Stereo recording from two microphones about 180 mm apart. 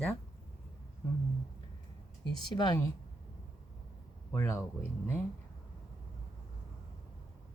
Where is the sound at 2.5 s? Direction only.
25° left (ahead or behind).